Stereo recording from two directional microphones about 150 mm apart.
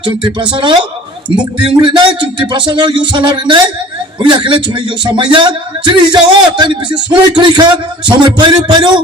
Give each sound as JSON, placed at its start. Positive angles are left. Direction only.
{"t": 0.0, "sound": "speech", "side_deg": -35}